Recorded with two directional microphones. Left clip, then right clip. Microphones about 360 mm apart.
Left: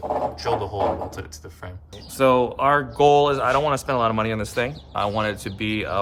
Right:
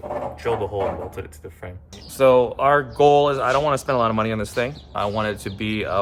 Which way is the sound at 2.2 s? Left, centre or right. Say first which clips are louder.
Right 3 dB; centre.